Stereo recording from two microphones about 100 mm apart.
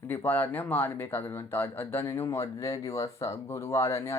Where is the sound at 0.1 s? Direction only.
20° left (ahead or behind).